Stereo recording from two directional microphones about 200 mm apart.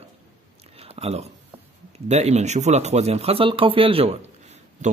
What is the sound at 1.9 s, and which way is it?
Speech, 35° right (ahead or behind).